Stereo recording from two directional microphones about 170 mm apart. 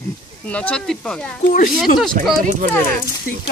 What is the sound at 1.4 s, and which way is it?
Speech, 50° left (ahead or behind).